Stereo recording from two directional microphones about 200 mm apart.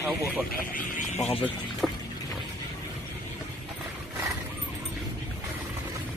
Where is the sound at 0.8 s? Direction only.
40° left (ahead or behind).